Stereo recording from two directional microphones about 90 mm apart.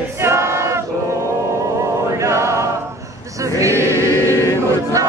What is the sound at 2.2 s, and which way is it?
Choir, 35° right (ahead or behind).